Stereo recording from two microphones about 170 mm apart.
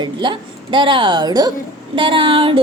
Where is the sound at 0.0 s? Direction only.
25° right (ahead or behind).